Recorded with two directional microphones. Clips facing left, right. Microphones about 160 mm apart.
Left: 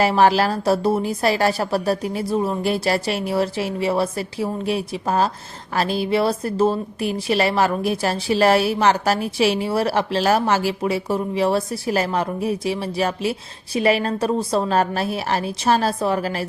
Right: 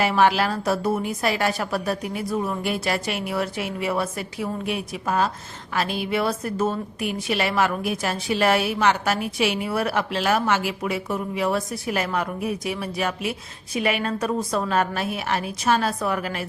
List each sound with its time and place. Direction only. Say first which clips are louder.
0.0 s a woman's voice: left 3 dB; 35° left (ahead or behind)